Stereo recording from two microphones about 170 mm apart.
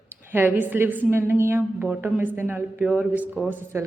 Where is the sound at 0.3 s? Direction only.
10° right (ahead or behind).